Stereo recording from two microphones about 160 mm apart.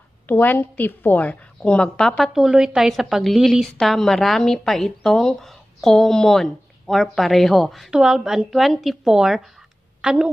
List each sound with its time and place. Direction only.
0.3 s a woman's voice: 10° left (ahead or behind); by 10.3 s 5° right (ahead or behind)